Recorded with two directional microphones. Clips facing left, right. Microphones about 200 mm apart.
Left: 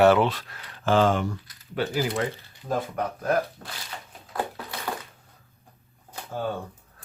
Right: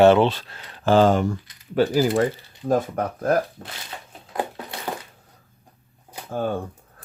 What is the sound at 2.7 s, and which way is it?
Speech, 45° right (ahead or behind).